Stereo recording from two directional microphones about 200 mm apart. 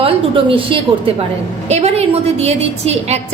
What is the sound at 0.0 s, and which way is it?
A woman's voice, 25° right (ahead or behind).